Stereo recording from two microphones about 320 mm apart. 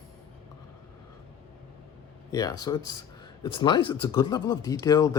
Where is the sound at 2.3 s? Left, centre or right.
Centre.